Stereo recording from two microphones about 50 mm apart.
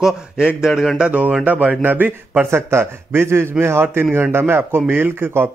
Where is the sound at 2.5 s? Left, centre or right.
Right.